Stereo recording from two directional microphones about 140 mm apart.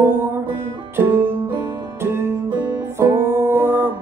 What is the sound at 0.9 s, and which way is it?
Music, 15° right (ahead or behind).